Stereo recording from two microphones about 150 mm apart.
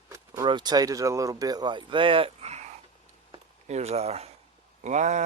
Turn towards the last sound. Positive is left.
turn(degrees=-50)  # may be behind; listen again after turning